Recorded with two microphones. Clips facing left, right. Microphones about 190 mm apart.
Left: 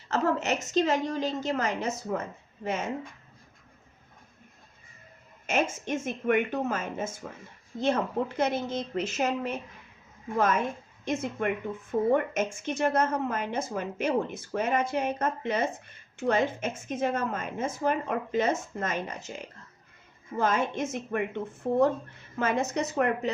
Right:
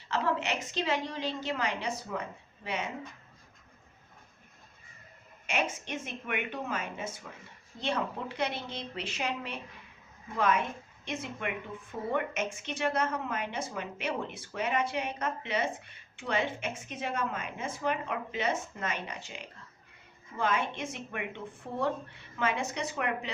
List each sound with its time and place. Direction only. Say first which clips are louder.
0.1 s a woman's voice: left 4 dB; 45° left (ahead or behind)
5.5 s a woman's voice: left 5 dB; 45° left (ahead or behind)